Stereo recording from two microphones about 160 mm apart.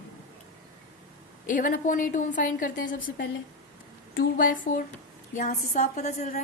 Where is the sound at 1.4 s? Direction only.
55° left (ahead or behind).